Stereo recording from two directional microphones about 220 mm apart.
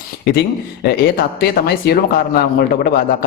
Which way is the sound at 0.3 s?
45° left (ahead or behind).